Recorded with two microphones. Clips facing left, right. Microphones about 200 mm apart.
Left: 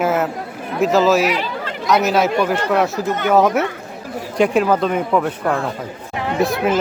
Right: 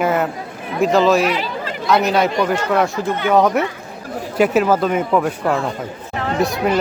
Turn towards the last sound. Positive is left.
turn(degrees=0)  # may be behind; listen again after turning